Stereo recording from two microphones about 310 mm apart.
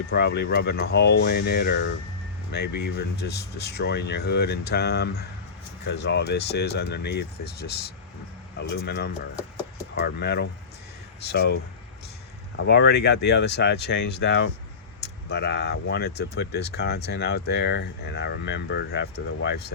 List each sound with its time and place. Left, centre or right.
0.1 s speech: left
8.7 s speech: left
10.2 s speech: left
12.5 s speech: left